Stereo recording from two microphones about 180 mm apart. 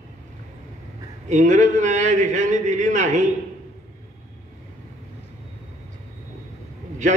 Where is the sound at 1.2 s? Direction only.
40° right (ahead or behind).